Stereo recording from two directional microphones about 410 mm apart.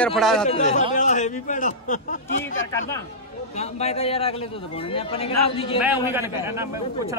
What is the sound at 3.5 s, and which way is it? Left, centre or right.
A man's voice, centre.